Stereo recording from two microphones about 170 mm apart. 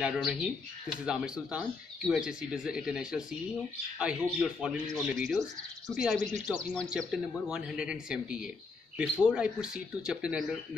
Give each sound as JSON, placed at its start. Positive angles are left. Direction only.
{"t": 0.0, "sound": "speech", "side_deg": -5}